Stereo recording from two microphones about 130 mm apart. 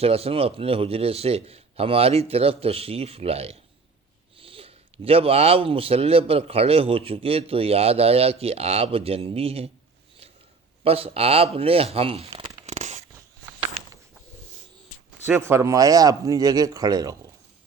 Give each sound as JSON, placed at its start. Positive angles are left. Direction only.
{"t": 0.0, "sound": "speech", "side_deg": -50}
{"t": 10.8, "sound": "speech", "side_deg": -50}
{"t": 12.6, "sound": "zipper", "side_deg": -60}
{"t": 15.4, "sound": "speech", "side_deg": -20}